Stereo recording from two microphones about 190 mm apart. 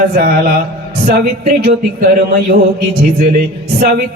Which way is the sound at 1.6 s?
55° right (ahead or behind).